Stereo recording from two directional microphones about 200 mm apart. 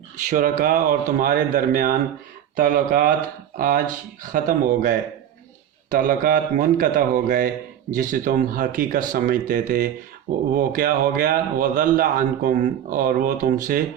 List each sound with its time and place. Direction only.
0.3 s a man's voice: 45° right (ahead or behind)